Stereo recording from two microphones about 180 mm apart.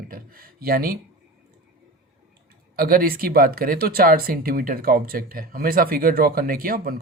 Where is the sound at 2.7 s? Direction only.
55° right (ahead or behind).